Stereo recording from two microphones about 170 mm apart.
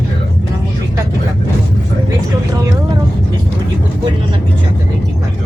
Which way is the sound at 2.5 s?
20° right (ahead or behind).